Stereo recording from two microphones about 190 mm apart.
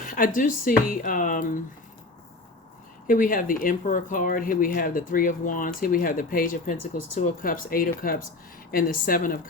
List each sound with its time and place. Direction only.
0.3 s speech: 45° left (ahead or behind)
3.1 s speech: 45° left (ahead or behind)